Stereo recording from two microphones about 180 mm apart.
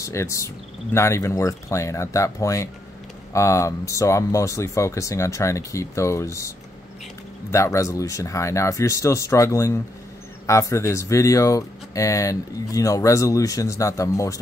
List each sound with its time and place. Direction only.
0.0 s speech: 15° left (ahead or behind)
7.5 s speech: 15° left (ahead or behind)